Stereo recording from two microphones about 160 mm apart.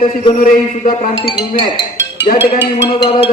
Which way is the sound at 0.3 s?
55° left (ahead or behind).